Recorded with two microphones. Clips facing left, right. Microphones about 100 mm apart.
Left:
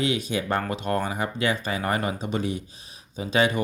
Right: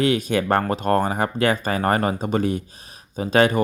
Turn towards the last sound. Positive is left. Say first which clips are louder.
# right 5 dB
turn(degrees=-50)  # may be behind; listen again after turning